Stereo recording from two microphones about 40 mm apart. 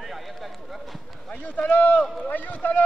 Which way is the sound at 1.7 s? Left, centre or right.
Left.